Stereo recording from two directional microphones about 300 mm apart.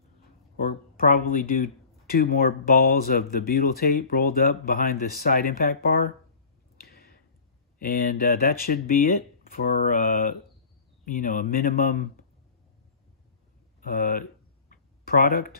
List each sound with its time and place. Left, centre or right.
0.6 s speech: left
6.8 s a sound: left
7.8 s speech: left
13.7 s speech: left
14.7 s tick-tock: left